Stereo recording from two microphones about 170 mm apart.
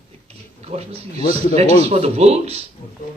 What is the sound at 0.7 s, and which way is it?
Speech, 40° right (ahead or behind).